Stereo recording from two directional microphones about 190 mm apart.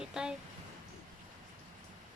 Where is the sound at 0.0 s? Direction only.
5° right (ahead or behind).